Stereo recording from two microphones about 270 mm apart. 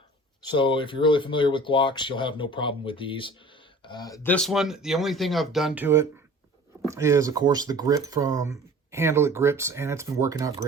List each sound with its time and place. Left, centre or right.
0.4 s speech: centre